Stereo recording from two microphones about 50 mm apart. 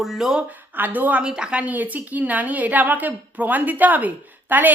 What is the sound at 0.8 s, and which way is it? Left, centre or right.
Speech, right.